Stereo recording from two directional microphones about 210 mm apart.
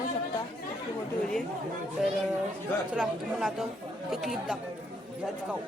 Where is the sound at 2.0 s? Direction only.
Centre (ahead or behind).